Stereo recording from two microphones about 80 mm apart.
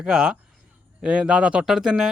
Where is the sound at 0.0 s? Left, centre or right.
Centre.